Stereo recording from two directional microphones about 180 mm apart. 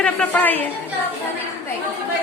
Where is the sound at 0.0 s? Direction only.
10° left (ahead or behind).